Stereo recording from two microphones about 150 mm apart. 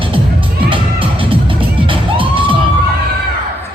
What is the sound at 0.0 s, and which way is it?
Music, 35° right (ahead or behind).